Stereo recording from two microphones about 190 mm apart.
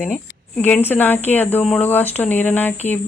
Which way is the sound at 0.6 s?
10° left (ahead or behind).